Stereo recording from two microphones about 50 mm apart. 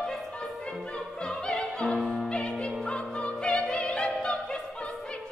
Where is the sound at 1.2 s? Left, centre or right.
Centre.